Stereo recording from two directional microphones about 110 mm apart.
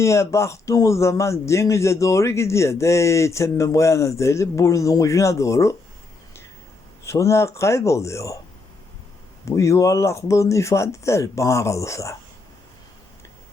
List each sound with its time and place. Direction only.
0.0 s speech: 25° left (ahead or behind)
7.0 s speech: 25° left (ahead or behind)
9.5 s speech: 30° left (ahead or behind)